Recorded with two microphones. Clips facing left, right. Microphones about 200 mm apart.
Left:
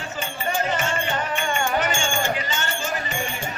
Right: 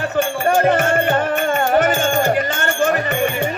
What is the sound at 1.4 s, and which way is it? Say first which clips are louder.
Music: right 7 dB; 45° right (ahead or behind).